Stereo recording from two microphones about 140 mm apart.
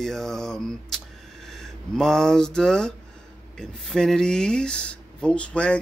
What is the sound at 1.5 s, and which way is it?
Speech, 5° left (ahead or behind).